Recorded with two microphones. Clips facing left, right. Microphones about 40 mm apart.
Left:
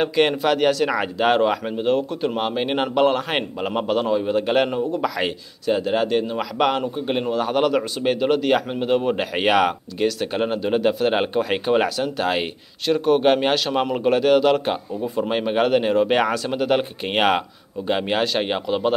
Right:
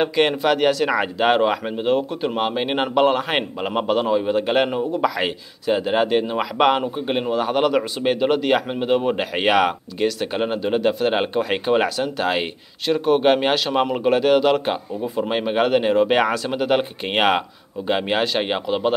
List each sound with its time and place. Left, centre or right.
0.0 s speech: centre